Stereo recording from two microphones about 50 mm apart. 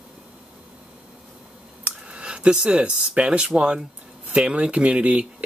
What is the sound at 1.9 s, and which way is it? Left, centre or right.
Speech, right.